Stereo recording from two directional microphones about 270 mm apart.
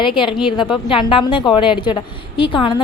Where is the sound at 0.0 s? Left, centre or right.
Centre.